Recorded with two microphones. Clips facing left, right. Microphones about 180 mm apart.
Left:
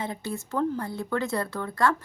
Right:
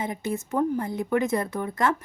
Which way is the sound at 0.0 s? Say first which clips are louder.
Right 3 dB; 20° right (ahead or behind).